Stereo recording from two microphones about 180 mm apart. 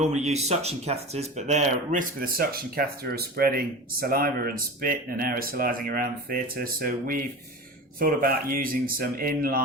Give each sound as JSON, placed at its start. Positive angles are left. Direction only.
{"t": 0.0, "sound": "speech", "side_deg": -40}